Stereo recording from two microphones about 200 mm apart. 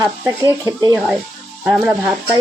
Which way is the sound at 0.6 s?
15° right (ahead or behind).